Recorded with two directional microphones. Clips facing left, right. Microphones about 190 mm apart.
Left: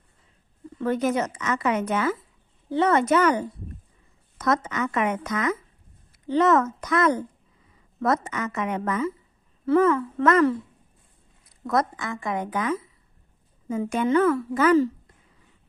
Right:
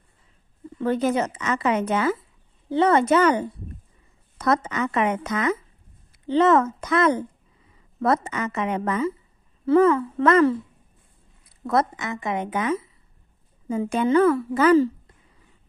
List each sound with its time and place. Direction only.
0.7 s a woman's voice: 30° right (ahead or behind)
11.6 s a woman's voice: 30° right (ahead or behind)